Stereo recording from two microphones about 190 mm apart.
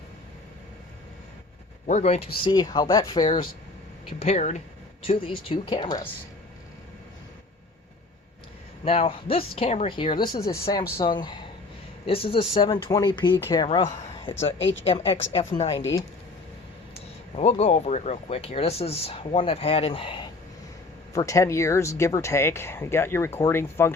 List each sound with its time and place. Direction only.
1.9 s speech: 35° left (ahead or behind); by 3.2 s 20° left (ahead or behind)
4.2 s speech: 35° left (ahead or behind)
8.8 s speech: 30° left (ahead or behind)
14.0 s speech: 35° left (ahead or behind)
14.6 s a woman's voice: 80° left
14.8 s speech: 30° left (ahead or behind)
15.7 s speech: 15° left (ahead or behind)
17.3 s speech: 35° left (ahead or behind); by 23.9 s 15° left (ahead or behind)